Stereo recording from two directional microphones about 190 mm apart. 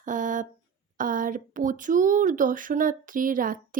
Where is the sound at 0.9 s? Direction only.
45° right (ahead or behind).